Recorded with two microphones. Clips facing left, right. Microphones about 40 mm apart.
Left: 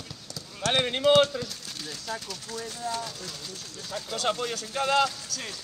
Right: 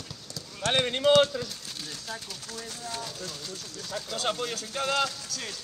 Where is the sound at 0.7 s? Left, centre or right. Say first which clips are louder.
Even; centre.